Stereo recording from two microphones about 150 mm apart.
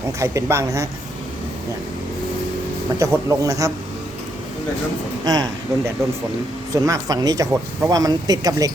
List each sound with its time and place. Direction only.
0.2 s speech: 20° right (ahead or behind)
3.0 s speech: 20° right (ahead or behind)
5.2 s speech: 25° right (ahead or behind)